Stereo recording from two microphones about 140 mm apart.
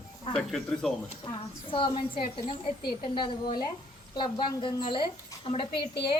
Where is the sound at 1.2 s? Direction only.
35° left (ahead or behind).